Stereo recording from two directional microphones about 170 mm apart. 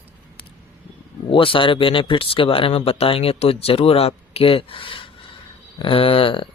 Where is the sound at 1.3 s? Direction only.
30° left (ahead or behind).